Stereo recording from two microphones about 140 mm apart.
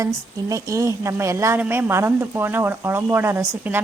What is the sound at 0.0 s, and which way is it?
A woman's voice, 25° right (ahead or behind).